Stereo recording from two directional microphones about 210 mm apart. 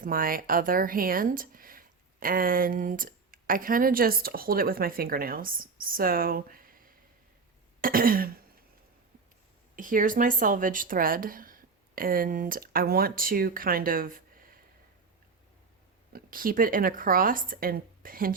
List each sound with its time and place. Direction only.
0.0 s speech: 40° right (ahead or behind)
9.7 s speech: 40° right (ahead or behind)
16.1 s a woman's voice: 40° right (ahead or behind)